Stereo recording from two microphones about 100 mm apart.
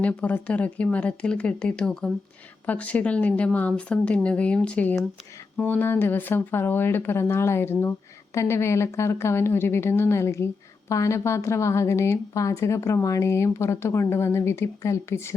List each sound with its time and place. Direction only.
0.0 s speech: 15° left (ahead or behind)